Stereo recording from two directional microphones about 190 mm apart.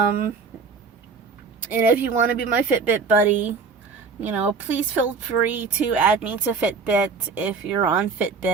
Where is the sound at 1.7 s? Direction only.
10° right (ahead or behind).